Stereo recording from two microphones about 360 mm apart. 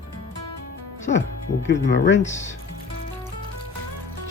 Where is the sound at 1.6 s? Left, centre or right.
Left.